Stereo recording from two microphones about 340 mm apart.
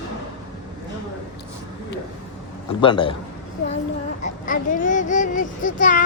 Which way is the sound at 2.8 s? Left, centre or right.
Centre.